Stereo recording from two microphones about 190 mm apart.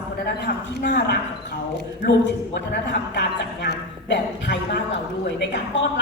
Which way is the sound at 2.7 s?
65° left (ahead or behind).